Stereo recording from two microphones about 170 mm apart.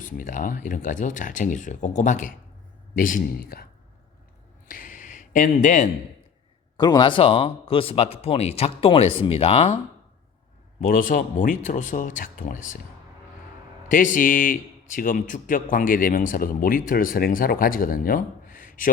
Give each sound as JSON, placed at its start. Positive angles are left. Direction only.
{"t": 0.0, "sound": "speech", "side_deg": 50}
{"t": 4.7, "sound": "a sound", "side_deg": 55}
{"t": 6.7, "sound": "speech", "side_deg": 25}
{"t": 10.8, "sound": "speech", "side_deg": 50}
{"t": 13.8, "sound": "speech", "side_deg": 50}